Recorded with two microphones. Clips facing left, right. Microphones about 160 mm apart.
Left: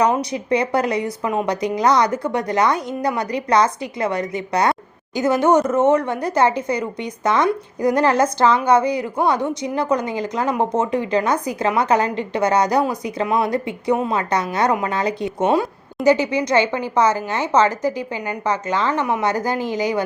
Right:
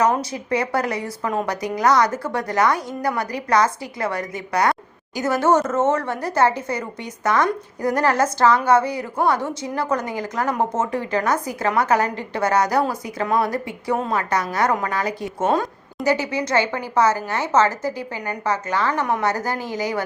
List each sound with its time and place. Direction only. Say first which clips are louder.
0.0 s a woman's voice: left 2 dB; 15° left (ahead or behind)
1.2 s a woman's voice: right 2 dB; 10° left (ahead or behind)
1.5 s a woman's voice: left 2 dB; 20° left (ahead or behind)